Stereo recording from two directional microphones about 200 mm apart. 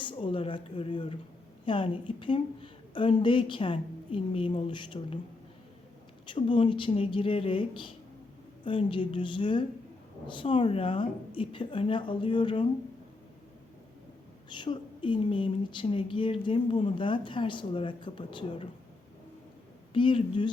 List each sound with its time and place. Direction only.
0.0 s speech: 25° left (ahead or behind)
6.2 s speech: 25° left (ahead or behind)
14.5 s speech: 25° left (ahead or behind)
19.9 s speech: 25° left (ahead or behind)